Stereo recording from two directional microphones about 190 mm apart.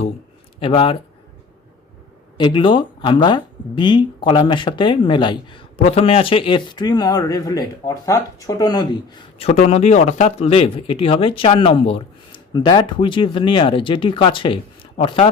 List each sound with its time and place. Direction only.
0.6 s speech: 30° left (ahead or behind)
2.4 s speech: 25° left (ahead or behind)
9.4 s speech: 35° left (ahead or behind)